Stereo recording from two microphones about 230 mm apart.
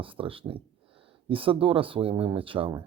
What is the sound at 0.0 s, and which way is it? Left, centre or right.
Speech, right.